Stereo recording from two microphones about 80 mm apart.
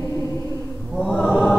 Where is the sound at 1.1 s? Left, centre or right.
Centre.